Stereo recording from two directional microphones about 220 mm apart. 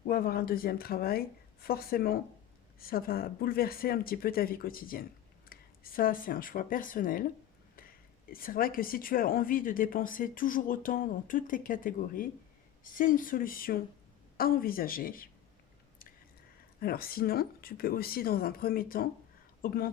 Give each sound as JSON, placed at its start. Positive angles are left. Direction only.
{"t": 0.1, "sound": "speech", "side_deg": 40}
{"t": 8.3, "sound": "a woman's voice", "side_deg": 40}
{"t": 16.8, "sound": "speech", "side_deg": 45}